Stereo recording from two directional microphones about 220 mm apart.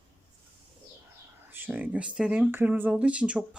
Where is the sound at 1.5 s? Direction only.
10° right (ahead or behind).